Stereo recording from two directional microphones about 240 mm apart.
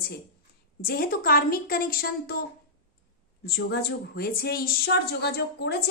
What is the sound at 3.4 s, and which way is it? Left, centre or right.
A woman's voice, left.